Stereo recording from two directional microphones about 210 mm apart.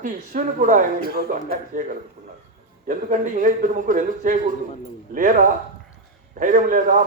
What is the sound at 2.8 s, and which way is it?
Speech, 40° right (ahead or behind).